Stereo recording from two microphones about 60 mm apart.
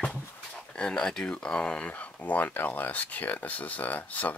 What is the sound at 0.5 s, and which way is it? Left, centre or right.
Speech, centre.